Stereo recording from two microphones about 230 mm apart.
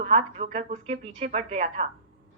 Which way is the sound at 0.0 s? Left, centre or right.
Right.